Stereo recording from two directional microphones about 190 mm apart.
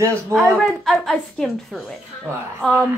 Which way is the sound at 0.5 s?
Centre (ahead or behind).